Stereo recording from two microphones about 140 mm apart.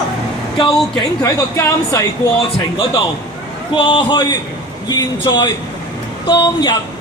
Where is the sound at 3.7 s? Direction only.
35° left (ahead or behind).